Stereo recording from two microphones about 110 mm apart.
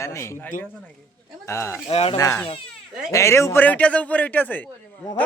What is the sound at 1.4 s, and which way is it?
Speech, 25° left (ahead or behind).